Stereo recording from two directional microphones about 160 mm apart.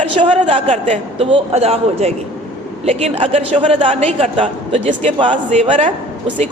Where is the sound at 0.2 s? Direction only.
35° right (ahead or behind).